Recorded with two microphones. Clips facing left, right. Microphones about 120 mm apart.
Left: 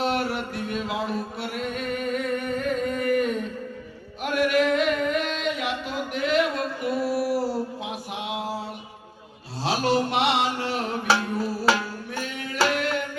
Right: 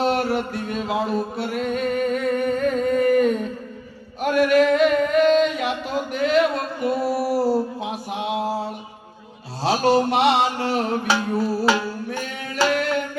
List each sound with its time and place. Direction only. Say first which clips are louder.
0.0 s music: right 5 dB; 35° right (ahead or behind)
4.2 s chant: right 5 dB; 40° right (ahead or behind)
6.1 s mantra: right 4 dB; 35° right (ahead or behind)
9.6 s mantra: right 5 dB; 35° right (ahead or behind)
11.0 s music: right 2 dB; centre (ahead or behind)